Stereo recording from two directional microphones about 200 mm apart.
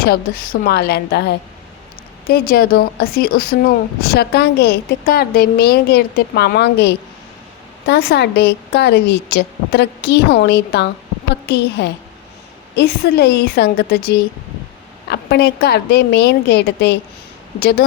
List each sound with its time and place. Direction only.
0.0 s a woman's voice: 45° left (ahead or behind)
2.3 s a woman's voice: 45° left (ahead or behind)